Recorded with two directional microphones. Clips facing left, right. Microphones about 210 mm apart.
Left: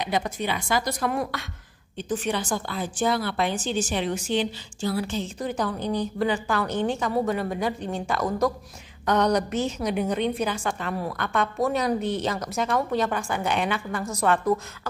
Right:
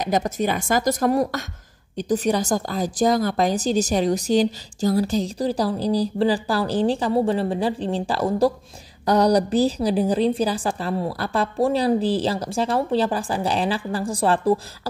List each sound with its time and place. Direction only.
0.0 s a woman's voice: 45° right (ahead or behind)